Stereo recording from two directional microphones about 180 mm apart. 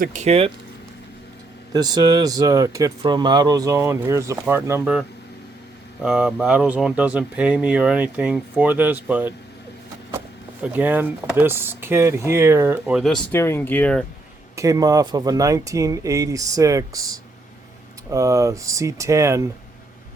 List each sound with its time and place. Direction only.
0.0 s speech: 40° right (ahead or behind)
1.7 s speech: 20° right (ahead or behind)
6.0 s speech: 5° right (ahead or behind)
13.3 s speech: 15° left (ahead or behind)
14.5 s speech: 15° right (ahead or behind)